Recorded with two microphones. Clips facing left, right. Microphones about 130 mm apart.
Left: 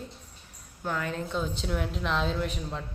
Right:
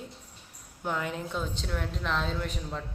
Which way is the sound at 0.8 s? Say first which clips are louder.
Even; 20° right (ahead or behind).